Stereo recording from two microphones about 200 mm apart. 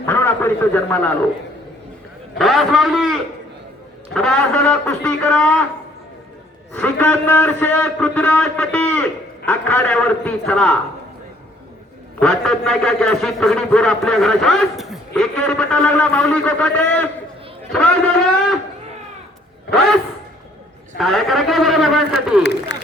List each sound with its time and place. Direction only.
0.0 s a man's voice: 10° left (ahead or behind)
2.4 s a man's voice: centre (ahead or behind)
6.7 s a man's voice: 10° left (ahead or behind)
12.2 s a man's voice: 5° left (ahead or behind)
21.0 s a man's voice: centre (ahead or behind)
22.7 s a sound: 60° left (ahead or behind)